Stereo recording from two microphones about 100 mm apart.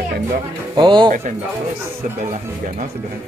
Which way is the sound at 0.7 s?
50° right (ahead or behind).